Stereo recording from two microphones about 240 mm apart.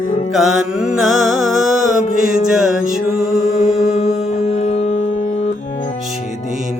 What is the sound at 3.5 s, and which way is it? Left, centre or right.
Music, left.